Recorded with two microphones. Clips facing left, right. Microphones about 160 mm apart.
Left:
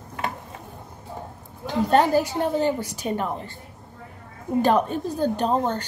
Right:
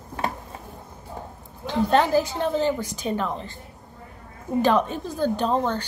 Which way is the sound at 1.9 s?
15° left (ahead or behind).